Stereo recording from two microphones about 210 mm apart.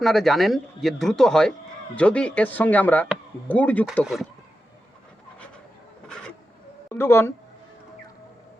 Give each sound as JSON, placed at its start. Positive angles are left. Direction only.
{"t": 0.0, "sound": "speech", "side_deg": 0}
{"t": 6.9, "sound": "speech", "side_deg": 10}